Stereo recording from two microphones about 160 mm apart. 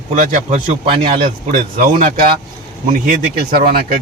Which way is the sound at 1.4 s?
55° right (ahead or behind).